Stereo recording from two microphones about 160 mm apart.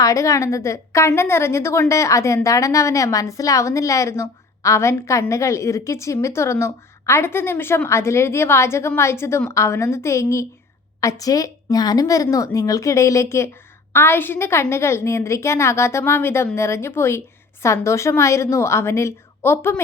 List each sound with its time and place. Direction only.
0.0 s a woman's voice: 20° left (ahead or behind)